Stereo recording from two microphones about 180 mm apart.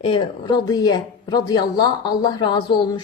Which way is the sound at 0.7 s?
20° left (ahead or behind).